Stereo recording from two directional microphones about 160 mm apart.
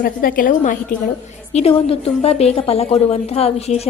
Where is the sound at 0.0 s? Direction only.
60° left (ahead or behind).